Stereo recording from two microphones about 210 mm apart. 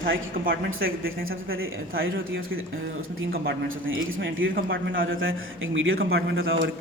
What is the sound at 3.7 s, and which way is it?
A man's voice, 70° right (ahead or behind).